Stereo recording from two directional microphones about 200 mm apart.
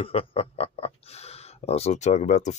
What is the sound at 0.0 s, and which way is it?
Speech, 25° left (ahead or behind).